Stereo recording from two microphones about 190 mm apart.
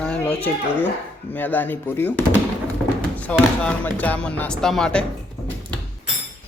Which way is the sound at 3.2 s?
5° left (ahead or behind).